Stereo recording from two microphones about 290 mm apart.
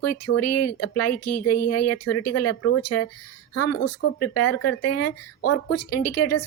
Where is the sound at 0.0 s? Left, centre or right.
Left.